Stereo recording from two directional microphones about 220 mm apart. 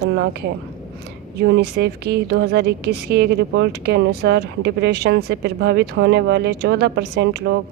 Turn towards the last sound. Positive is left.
turn(degrees=-50)  # may be behind; listen again after turning